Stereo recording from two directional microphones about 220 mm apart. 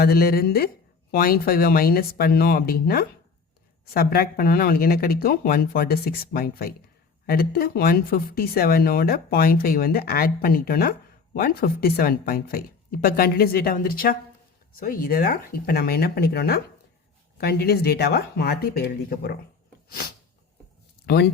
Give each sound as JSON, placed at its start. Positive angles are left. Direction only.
{"t": 0.0, "sound": "speech", "side_deg": 45}